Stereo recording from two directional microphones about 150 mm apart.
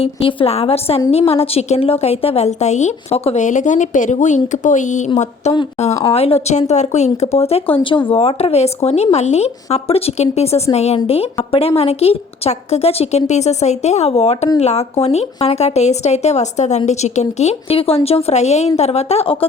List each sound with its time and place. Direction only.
0.0 s a woman's voice: 35° left (ahead or behind)